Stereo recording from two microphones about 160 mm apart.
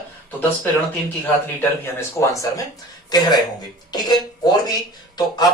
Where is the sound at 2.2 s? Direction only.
20° left (ahead or behind).